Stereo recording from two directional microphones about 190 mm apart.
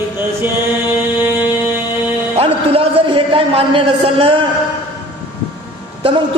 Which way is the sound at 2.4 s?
30° right (ahead or behind).